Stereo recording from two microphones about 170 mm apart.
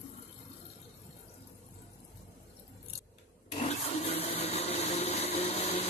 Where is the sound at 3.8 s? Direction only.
40° left (ahead or behind).